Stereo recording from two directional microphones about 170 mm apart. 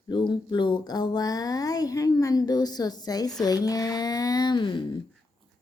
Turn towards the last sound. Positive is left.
turn(degrees=25)  # may be behind; listen again after turning